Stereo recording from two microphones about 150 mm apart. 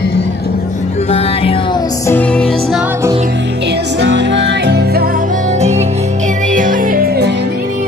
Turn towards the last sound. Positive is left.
turn(degrees=-85)